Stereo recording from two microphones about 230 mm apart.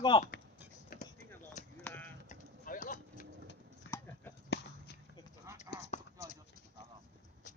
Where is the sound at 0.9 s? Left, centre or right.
Left.